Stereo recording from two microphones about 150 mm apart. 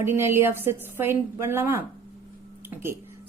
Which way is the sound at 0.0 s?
15° right (ahead or behind).